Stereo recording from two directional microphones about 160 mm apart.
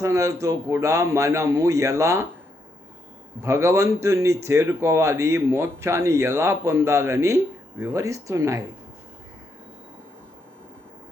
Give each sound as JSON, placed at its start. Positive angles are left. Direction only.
{"t": 0.0, "sound": "a man's voice", "side_deg": -20}
{"t": 3.4, "sound": "speech", "side_deg": -15}